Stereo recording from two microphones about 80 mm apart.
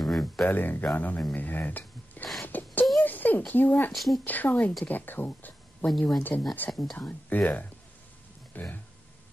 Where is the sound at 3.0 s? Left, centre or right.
Left.